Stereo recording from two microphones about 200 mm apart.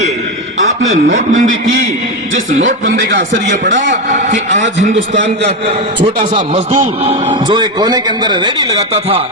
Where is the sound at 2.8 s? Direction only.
45° right (ahead or behind).